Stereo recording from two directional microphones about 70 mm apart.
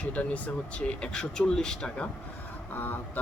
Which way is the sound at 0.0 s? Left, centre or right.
Centre.